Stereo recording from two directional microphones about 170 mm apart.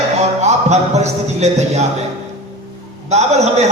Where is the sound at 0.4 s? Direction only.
40° right (ahead or behind).